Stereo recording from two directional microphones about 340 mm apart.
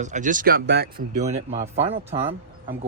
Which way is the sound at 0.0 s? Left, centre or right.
Right.